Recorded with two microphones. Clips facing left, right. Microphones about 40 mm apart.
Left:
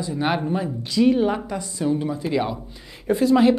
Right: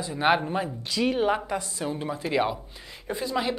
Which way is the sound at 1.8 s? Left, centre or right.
Centre.